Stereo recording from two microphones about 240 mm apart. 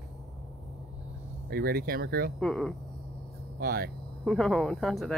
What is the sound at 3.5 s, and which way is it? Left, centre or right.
Speech, right.